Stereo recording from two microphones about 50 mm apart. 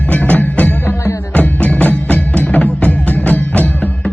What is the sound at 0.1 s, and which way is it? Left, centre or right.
Music, left.